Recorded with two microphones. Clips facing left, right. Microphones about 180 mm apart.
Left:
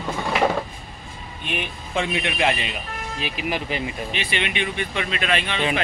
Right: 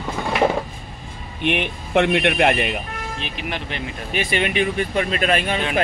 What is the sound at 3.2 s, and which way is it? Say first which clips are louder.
Speech: left 5 dB; 5° left (ahead or behind).